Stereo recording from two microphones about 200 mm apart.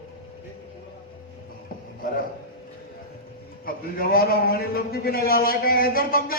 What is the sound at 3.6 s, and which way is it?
A man's voice, 45° left (ahead or behind).